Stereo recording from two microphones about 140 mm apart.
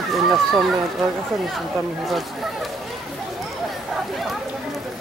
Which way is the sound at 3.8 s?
Centre (ahead or behind).